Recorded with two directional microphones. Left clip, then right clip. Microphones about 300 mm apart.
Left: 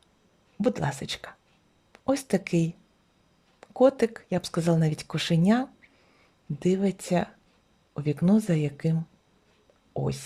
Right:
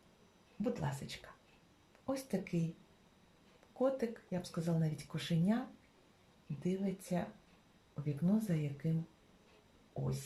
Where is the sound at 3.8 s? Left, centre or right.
Left.